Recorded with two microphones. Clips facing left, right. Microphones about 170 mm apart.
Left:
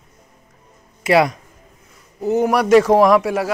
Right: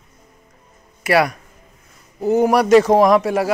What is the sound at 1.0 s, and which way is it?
Speech, 20° left (ahead or behind).